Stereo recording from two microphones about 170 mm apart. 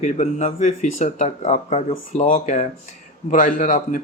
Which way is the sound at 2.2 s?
50° left (ahead or behind).